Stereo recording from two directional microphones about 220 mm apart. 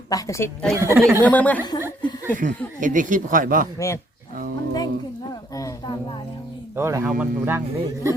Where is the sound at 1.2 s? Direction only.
5° left (ahead or behind).